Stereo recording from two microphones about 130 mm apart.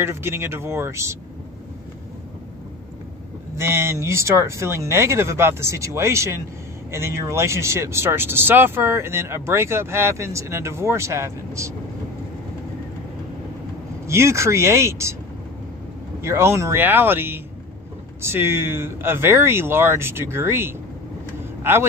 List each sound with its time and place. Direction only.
0.0 s speech: 20° right (ahead or behind)
3.5 s speech: 20° right (ahead or behind)
14.0 s speech: 20° right (ahead or behind)
16.2 s speech: 20° right (ahead or behind)